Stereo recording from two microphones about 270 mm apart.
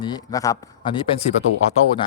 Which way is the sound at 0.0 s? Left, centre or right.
Centre.